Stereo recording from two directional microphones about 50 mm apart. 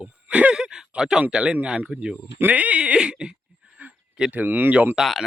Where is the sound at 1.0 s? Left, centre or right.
Centre.